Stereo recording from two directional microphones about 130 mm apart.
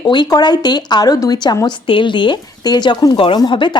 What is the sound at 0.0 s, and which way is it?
A woman's voice, 35° left (ahead or behind).